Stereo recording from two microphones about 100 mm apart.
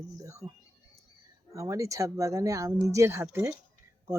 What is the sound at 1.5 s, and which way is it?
Speech, 30° right (ahead or behind).